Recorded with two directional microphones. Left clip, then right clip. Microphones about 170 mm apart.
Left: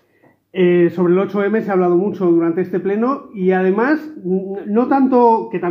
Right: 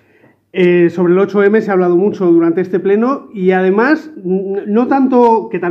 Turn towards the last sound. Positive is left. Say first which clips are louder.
# right 3 dB
turn(degrees=-15)  # may be behind; listen again after turning